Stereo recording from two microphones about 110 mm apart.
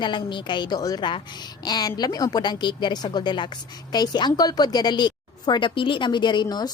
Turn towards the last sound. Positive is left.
turn(degrees=40)  # may be behind; listen again after turning